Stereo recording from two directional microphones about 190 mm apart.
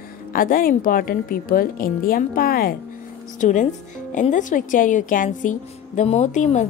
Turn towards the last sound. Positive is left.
turn(degrees=40)  # may be behind; listen again after turning